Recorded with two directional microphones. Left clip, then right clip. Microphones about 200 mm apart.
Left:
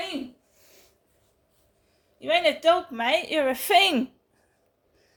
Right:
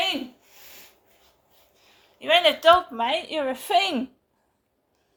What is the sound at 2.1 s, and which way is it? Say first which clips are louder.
A woman's voice: right 3 dB; 40° left (ahead or behind).